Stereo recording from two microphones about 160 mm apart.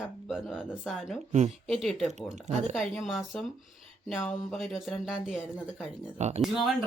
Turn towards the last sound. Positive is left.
turn(degrees=-5)  # may be behind; listen again after turning